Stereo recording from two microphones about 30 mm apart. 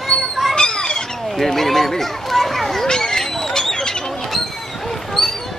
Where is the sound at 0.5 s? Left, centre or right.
Left.